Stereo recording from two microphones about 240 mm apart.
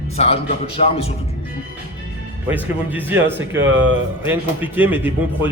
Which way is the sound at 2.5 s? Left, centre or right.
Centre.